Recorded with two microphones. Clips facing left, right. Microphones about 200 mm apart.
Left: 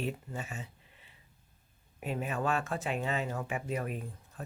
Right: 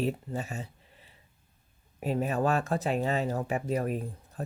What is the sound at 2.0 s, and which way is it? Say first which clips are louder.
Speech: right 6 dB; 35° right (ahead or behind).